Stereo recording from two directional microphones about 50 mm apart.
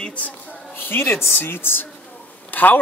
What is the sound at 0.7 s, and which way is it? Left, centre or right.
A woman's voice, left.